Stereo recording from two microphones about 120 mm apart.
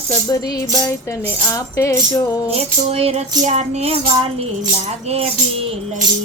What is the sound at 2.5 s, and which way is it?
Tambourine, 60° right (ahead or behind).